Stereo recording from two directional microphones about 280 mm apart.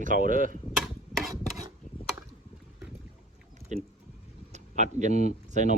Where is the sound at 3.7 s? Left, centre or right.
Right.